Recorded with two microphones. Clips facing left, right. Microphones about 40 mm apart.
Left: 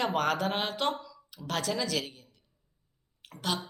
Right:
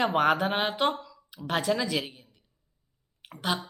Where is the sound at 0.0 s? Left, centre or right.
Centre.